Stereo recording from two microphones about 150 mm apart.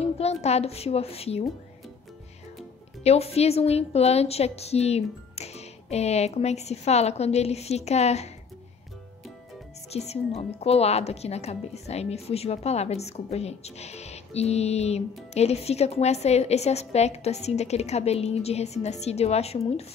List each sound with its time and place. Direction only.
0.0 s a woman's voice: 45° left (ahead or behind)
3.0 s a woman's voice: 45° left (ahead or behind)
9.9 s a woman's voice: 45° left (ahead or behind)